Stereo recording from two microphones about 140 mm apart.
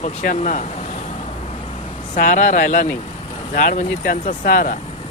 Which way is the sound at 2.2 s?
70° left (ahead or behind).